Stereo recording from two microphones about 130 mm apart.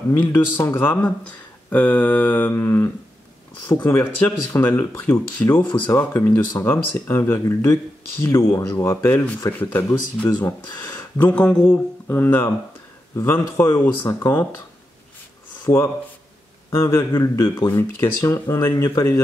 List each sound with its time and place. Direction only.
0.1 s speech: 15° left (ahead or behind)
16.7 s speech: 25° left (ahead or behind)